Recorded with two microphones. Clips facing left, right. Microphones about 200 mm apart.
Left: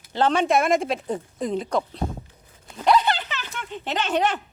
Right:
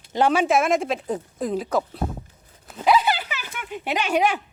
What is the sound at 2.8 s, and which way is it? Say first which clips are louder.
Dog: even; 5° right (ahead or behind).